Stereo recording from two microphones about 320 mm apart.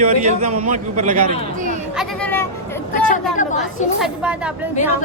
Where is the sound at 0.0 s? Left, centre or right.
Right.